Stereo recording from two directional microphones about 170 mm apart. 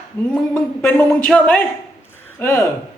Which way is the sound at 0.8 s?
10° left (ahead or behind).